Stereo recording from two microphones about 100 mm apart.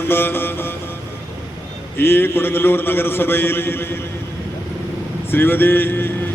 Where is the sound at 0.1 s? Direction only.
20° left (ahead or behind).